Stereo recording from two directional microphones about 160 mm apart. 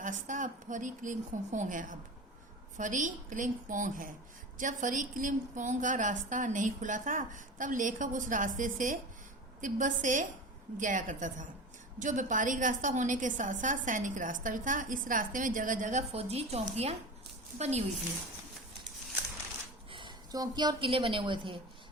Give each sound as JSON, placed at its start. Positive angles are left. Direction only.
{"t": 0.0, "sound": "a woman's voice", "side_deg": -50}
{"t": 19.9, "sound": "a woman's voice", "side_deg": -30}